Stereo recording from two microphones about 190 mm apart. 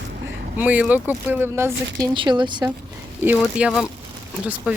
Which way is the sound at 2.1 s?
25° right (ahead or behind).